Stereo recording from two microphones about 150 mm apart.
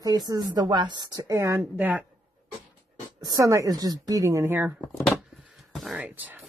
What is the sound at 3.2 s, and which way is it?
A woman's voice, 20° right (ahead or behind).